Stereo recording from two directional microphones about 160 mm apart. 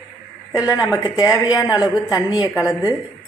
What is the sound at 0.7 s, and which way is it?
Speech, 20° left (ahead or behind).